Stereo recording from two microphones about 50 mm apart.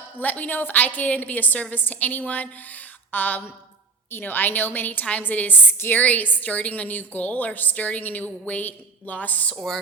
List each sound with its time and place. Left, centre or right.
0.2 s a woman's voice: left